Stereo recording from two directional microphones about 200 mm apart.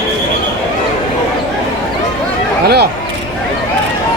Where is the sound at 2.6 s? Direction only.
55° right (ahead or behind).